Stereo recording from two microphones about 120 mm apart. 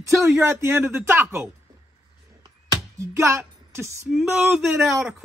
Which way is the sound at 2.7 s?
25° right (ahead or behind).